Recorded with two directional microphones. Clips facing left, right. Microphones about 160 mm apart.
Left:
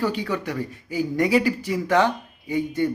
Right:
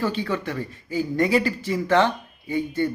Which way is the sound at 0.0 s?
15° left (ahead or behind).